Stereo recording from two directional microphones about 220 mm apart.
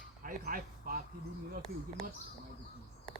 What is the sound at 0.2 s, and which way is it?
Speech, 40° right (ahead or behind).